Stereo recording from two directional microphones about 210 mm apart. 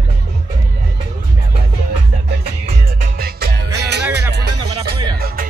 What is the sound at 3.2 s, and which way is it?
Music, 50° right (ahead or behind).